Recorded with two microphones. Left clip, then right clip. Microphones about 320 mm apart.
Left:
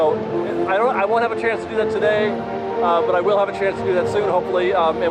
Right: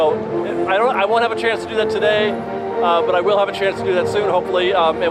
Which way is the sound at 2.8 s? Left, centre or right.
Centre.